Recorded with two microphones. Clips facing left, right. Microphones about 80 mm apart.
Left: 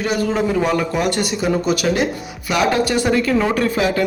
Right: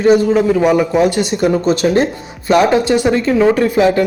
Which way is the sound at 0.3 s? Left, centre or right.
Centre.